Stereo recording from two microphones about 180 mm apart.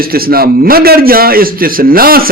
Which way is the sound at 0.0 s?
55° right (ahead or behind).